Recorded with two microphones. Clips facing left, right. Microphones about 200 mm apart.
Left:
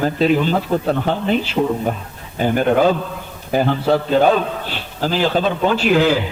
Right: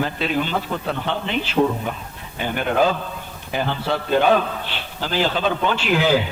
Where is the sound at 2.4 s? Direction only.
40° left (ahead or behind).